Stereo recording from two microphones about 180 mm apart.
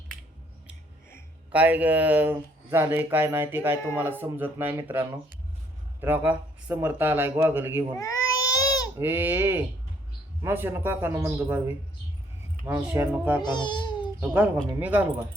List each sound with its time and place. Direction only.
1.5 s speech: 10° right (ahead or behind)
7.9 s baby cry: 20° left (ahead or behind)
9.0 s speech: 10° right (ahead or behind)
13.4 s speech: 25° left (ahead or behind)
14.2 s speech: 10° right (ahead or behind)